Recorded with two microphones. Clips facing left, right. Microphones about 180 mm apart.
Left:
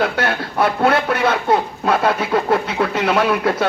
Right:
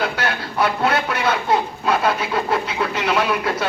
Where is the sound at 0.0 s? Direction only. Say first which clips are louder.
Left 4 dB; 50° left (ahead or behind).